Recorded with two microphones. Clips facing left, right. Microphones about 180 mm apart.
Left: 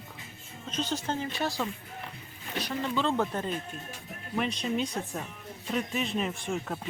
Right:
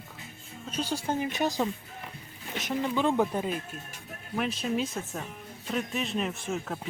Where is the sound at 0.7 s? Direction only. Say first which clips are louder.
Right 1 dB; 10° right (ahead or behind).